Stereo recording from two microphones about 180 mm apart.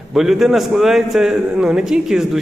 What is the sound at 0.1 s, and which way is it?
A man's voice, centre (ahead or behind).